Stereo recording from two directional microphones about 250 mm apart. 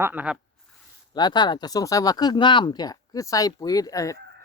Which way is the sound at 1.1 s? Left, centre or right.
Centre.